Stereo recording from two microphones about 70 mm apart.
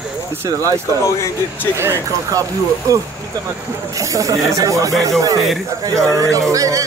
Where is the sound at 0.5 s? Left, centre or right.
Right.